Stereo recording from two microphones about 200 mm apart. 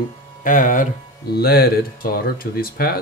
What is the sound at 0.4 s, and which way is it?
Speech, 40° left (ahead or behind).